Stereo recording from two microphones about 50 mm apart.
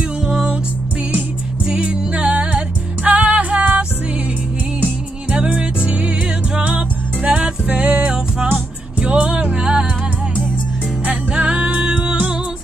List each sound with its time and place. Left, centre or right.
0.3 s music: centre
1.7 s music: right
5.4 s music: centre
11.1 s music: right